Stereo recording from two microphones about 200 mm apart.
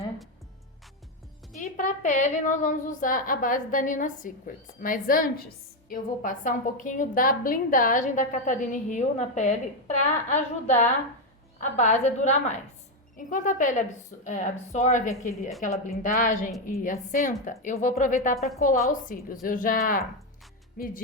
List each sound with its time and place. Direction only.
1.5 s a woman's voice: 40° left (ahead or behind)
16.1 s a woman's voice: 40° left (ahead or behind)
18.3 s a woman's voice: centre (ahead or behind)
18.6 s a woman's voice: 40° left (ahead or behind)